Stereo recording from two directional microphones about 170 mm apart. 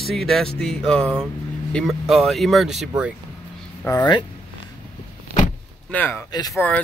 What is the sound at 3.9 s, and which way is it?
Speech, 15° left (ahead or behind).